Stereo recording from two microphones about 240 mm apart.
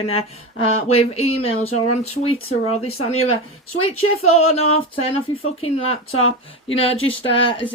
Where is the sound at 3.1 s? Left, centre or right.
Left.